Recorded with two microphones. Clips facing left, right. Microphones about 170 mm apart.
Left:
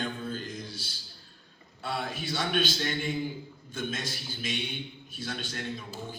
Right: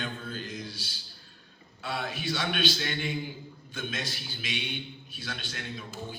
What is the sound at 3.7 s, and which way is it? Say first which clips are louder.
A man's voice: left 2 dB; 50° left (ahead or behind).